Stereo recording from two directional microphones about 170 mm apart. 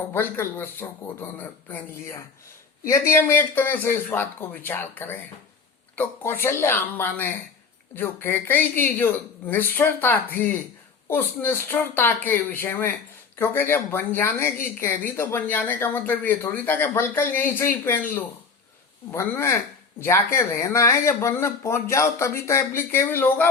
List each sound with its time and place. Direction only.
0.1 s speech: 10° left (ahead or behind)